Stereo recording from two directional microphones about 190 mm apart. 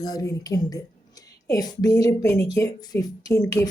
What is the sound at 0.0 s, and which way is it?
Speech, 20° left (ahead or behind).